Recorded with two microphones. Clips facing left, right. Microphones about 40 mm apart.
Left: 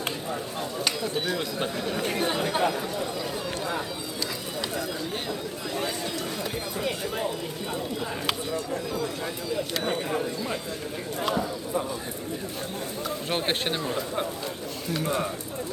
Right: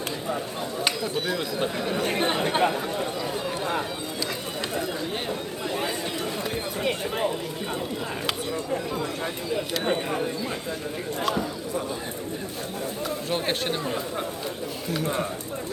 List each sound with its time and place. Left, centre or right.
1.3 s speech: centre
2.0 s speech: right
13.3 s speech: left